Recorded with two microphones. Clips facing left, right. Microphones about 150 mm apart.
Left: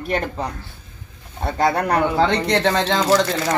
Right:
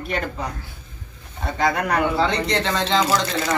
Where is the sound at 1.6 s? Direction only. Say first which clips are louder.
Left 3 dB; 35° left (ahead or behind).